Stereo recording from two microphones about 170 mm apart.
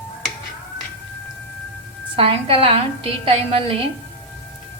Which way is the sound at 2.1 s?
35° right (ahead or behind).